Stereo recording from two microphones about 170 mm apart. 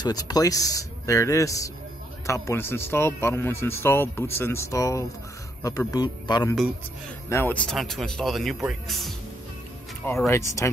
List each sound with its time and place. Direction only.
0.0 s speech: 25° left (ahead or behind)
7.2 s speech: 15° left (ahead or behind)
10.0 s speech: 15° left (ahead or behind)